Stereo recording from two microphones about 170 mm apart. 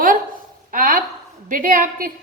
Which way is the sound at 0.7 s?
55° right (ahead or behind).